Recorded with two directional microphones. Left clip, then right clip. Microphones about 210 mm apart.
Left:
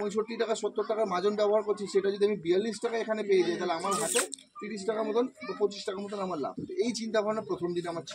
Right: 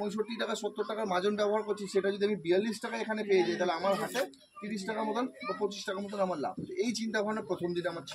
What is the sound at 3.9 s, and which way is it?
Speech, 35° left (ahead or behind).